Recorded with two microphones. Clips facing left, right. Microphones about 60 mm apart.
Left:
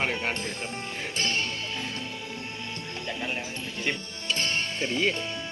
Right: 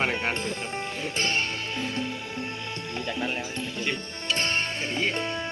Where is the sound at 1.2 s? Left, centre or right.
Right.